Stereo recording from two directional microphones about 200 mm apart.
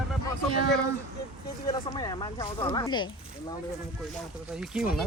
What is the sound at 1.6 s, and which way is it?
Speech, 20° left (ahead or behind).